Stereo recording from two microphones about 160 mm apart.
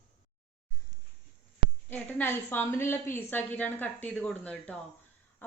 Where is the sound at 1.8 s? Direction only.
15° left (ahead or behind).